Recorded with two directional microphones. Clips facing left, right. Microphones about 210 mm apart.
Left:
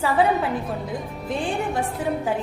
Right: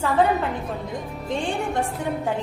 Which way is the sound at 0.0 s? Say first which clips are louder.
Even; 5° left (ahead or behind).